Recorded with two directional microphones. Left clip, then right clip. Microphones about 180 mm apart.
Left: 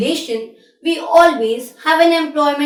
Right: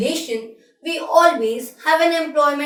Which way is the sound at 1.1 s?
15° left (ahead or behind).